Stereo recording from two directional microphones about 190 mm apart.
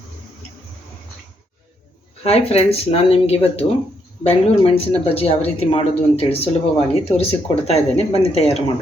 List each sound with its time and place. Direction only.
2.2 s speech: 30° left (ahead or behind)